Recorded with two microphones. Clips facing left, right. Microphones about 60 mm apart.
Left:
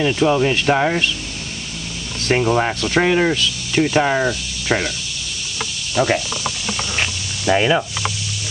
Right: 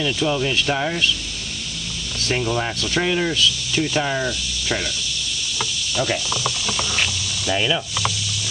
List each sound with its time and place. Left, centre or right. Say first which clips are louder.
0.0 s speech: left 5 dB; left
2.2 s speech: left 6 dB; left
5.9 s speech: left 6 dB; left
7.4 s speech: left 6 dB; left